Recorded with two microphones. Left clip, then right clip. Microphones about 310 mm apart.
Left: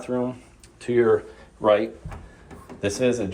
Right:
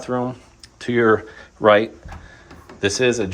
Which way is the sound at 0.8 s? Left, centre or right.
Right.